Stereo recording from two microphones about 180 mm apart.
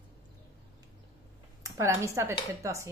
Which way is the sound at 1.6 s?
15° right (ahead or behind).